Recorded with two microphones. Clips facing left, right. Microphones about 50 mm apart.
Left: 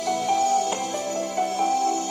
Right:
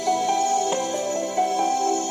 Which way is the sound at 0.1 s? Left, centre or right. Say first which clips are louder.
Even; right.